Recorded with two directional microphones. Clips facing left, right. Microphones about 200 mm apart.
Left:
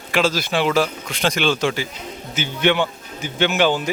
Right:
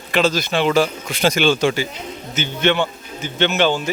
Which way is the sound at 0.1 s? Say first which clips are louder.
Right 2 dB; 5° left (ahead or behind).